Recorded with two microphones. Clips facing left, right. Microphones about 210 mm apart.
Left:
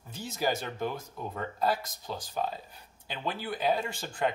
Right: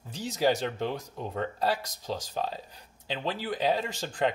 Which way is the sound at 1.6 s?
90° right.